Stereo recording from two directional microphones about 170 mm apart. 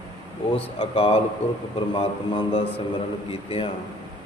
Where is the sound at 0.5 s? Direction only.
35° left (ahead or behind).